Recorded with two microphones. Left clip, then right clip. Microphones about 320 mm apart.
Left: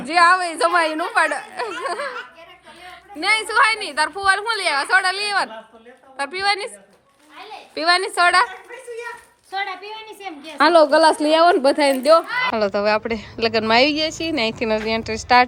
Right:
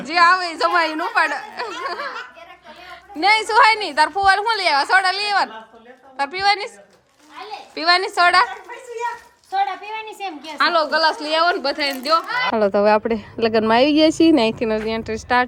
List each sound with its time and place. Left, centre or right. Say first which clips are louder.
0.0 s a woman's voice: even; centre
3.2 s a woman's voice: right 3 dB; centre
7.8 s a woman's voice: right 1 dB; centre
10.6 s a woman's voice: left 4 dB; centre
12.3 s a woman's voice: right 1 dB; centre
12.5 s a woman's voice: right 5 dB; centre